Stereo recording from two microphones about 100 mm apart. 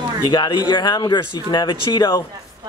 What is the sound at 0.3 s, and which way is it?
Speech, 45° left (ahead or behind).